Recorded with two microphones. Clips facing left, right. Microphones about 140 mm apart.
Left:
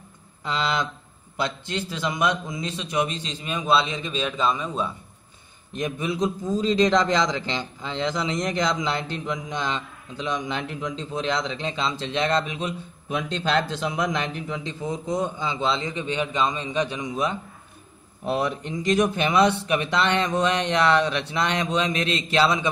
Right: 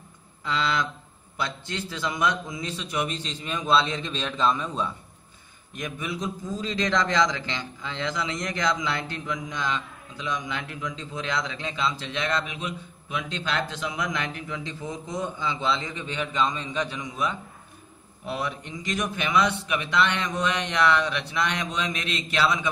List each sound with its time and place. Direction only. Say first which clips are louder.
0.4 s a man's voice: left 1 dB; 20° left (ahead or behind); by 4.8 s 5° left (ahead or behind)
5.7 s a man's voice: left 6 dB; 30° left (ahead or behind)